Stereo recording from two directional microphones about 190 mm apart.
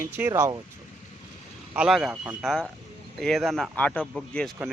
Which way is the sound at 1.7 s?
5° right (ahead or behind).